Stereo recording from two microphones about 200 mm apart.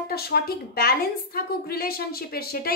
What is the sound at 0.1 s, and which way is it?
A woman's voice, 50° left (ahead or behind).